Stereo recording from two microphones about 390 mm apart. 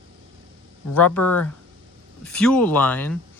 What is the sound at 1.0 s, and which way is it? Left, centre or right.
Speech, centre.